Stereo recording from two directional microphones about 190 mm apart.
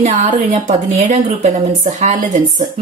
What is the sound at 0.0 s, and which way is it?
A woman's voice, 35° right (ahead or behind).